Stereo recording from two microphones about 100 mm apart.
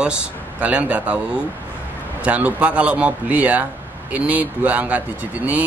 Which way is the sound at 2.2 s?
15° right (ahead or behind).